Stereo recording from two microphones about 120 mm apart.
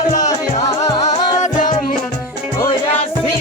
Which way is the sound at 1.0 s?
85° left.